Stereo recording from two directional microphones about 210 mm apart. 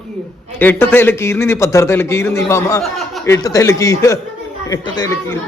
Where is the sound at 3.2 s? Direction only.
15° left (ahead or behind).